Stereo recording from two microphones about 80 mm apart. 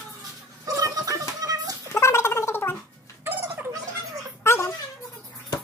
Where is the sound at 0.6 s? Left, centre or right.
Right.